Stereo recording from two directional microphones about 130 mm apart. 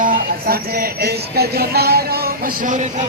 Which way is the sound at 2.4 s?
80° right.